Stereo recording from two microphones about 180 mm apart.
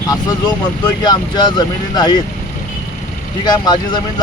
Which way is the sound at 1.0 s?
25° left (ahead or behind).